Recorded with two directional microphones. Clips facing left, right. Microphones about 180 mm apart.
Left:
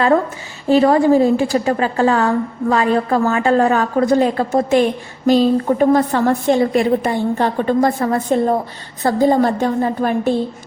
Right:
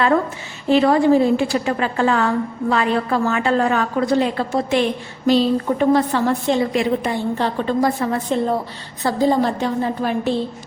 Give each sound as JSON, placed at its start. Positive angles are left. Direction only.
{"t": 0.7, "sound": "a woman's voice", "side_deg": 40}